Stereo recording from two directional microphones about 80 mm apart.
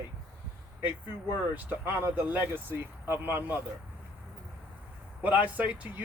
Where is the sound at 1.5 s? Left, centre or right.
Right.